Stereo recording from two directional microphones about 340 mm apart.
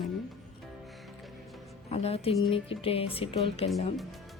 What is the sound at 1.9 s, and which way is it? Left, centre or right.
Speech, centre.